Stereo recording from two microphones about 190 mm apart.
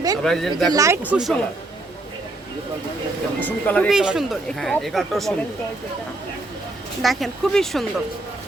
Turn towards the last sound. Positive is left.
turn(degrees=0)  # may be behind; listen again after turning